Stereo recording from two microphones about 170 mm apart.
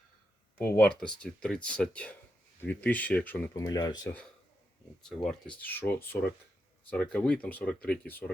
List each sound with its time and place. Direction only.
0.6 s speech: 5° left (ahead or behind)
3.6 s speech: 25° left (ahead or behind)
5.0 s speech: centre (ahead or behind)